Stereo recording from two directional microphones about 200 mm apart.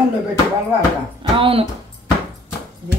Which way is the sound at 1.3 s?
25° right (ahead or behind).